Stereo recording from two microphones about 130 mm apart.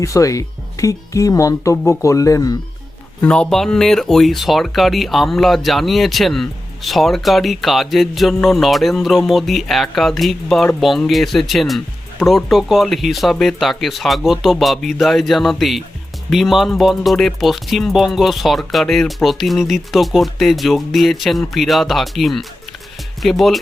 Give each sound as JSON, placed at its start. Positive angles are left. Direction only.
{"t": 0.0, "sound": "speech", "side_deg": 25}
{"t": 3.2, "sound": "speech", "side_deg": 10}